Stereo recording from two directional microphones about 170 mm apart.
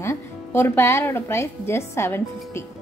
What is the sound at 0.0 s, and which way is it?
A woman's voice, 15° left (ahead or behind).